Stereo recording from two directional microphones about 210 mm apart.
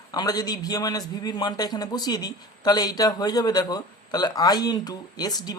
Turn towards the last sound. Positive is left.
turn(degrees=20)  # may be behind; listen again after turning